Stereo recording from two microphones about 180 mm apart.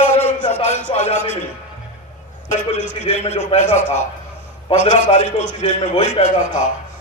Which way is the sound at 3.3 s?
40° left (ahead or behind).